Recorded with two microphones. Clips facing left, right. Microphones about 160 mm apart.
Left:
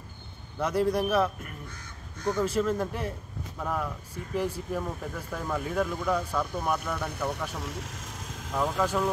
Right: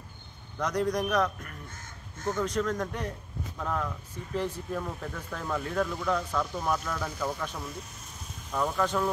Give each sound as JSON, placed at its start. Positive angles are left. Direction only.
{"t": 0.6, "sound": "a man's voice", "side_deg": 5}
{"t": 7.5, "sound": "vehicle", "side_deg": 90}
{"t": 8.5, "sound": "speech", "side_deg": 10}